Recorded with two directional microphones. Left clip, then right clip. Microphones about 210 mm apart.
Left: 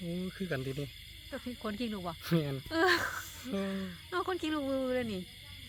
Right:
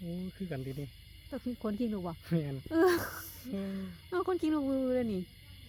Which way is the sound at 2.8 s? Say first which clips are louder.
Right 1 dB; 55° right (ahead or behind).